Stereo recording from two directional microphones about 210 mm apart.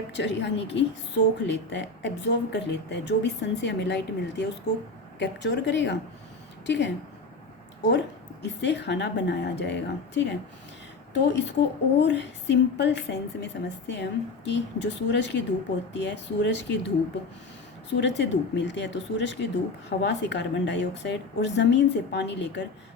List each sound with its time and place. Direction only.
0.1 s a woman's voice: 55° left (ahead or behind)
11.1 s a woman's voice: 55° left (ahead or behind)